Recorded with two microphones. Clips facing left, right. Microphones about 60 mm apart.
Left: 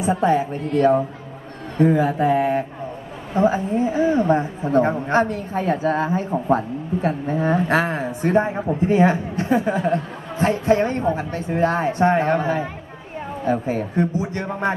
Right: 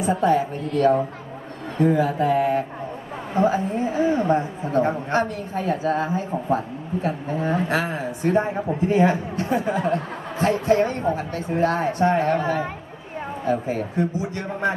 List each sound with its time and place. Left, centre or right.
0.0 s a woman's voice: centre; by 14.7 s left